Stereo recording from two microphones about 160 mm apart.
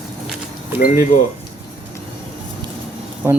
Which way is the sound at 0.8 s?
60° left (ahead or behind).